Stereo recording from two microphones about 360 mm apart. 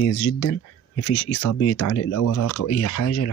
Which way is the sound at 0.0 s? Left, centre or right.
Left.